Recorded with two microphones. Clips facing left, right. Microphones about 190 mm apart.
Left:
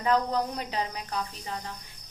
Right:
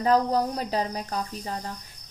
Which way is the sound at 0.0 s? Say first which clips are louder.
Right 4 dB; 40° right (ahead or behind).